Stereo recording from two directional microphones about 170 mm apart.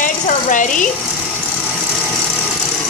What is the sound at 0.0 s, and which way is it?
Sewing machine, 50° left (ahead or behind).